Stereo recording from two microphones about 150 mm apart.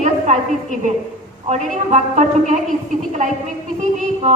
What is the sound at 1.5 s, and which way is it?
A woman's voice, 50° right (ahead or behind).